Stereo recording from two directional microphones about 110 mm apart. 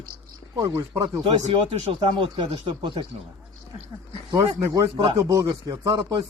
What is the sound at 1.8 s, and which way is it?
Speech, 50° right (ahead or behind).